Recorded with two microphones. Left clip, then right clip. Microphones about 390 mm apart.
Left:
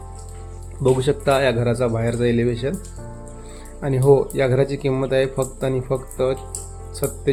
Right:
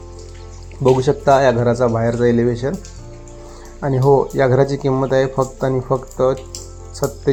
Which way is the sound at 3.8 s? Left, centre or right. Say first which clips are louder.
Right 2 dB; centre.